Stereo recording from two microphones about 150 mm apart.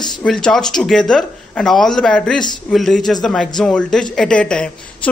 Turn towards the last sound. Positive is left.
turn(degrees=5)  # may be behind; listen again after turning